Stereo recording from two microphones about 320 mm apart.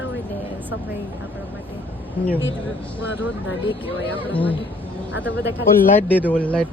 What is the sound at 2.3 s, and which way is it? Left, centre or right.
Speech, left.